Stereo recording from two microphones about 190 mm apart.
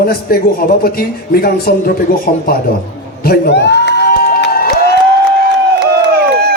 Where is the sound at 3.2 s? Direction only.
55° left (ahead or behind).